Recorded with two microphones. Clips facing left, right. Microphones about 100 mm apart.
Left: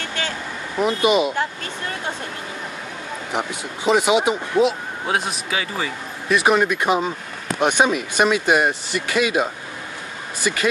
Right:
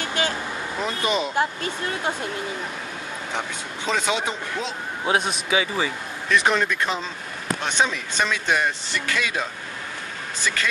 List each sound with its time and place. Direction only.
0.7 s speech: 15° left (ahead or behind)
3.3 s speech: 15° left (ahead or behind)
5.0 s speech: centre (ahead or behind)
6.2 s speech: 10° left (ahead or behind)